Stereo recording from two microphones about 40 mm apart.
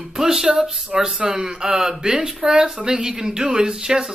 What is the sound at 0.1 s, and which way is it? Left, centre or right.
Speech, centre.